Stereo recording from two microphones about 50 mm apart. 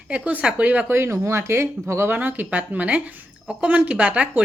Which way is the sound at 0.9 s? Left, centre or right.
Right.